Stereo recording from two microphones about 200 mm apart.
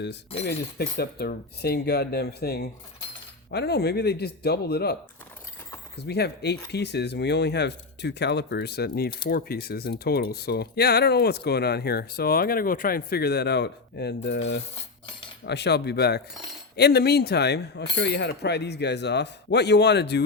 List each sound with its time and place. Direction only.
0.4 s speech: 50° left (ahead or behind)
6.0 s speech: 55° left (ahead or behind)